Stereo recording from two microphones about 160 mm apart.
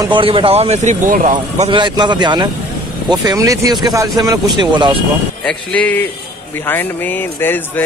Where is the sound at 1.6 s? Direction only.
30° right (ahead or behind).